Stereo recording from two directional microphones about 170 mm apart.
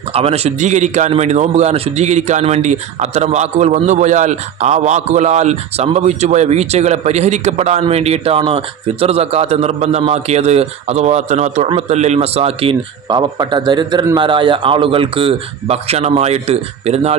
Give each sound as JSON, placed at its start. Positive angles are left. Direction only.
{"t": 0.1, "sound": "a man's voice", "side_deg": -35}